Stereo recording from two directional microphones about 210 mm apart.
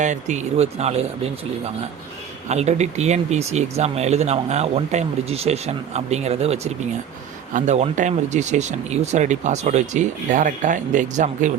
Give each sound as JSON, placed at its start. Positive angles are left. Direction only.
{"t": 0.0, "sound": "speech", "side_deg": -35}
{"t": 2.5, "sound": "speech", "side_deg": -30}